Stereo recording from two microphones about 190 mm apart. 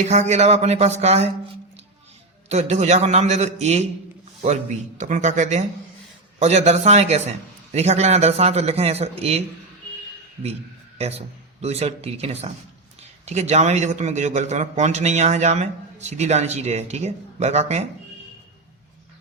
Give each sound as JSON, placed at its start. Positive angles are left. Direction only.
{"t": 0.1, "sound": "speech", "side_deg": -35}
{"t": 2.5, "sound": "speech", "side_deg": -35}
{"t": 11.0, "sound": "speech", "side_deg": -35}